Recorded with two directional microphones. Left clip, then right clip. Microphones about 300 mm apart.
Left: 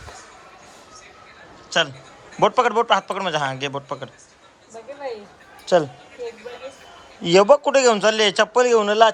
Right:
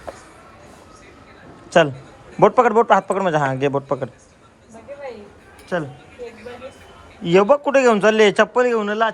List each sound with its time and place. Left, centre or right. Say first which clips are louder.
1.7 s a man's voice: right 6 dB; centre
5.7 s a man's voice: left 7 dB; centre
7.2 s a man's voice: left 1 dB; centre